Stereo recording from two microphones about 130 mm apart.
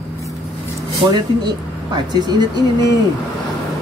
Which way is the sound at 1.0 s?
45° right (ahead or behind).